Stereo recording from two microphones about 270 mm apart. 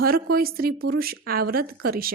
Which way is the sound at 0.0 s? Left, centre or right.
Right.